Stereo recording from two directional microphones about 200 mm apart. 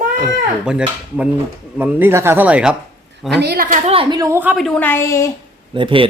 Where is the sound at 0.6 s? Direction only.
5° right (ahead or behind).